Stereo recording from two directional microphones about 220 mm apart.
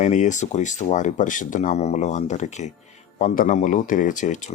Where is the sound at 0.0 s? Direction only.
35° left (ahead or behind).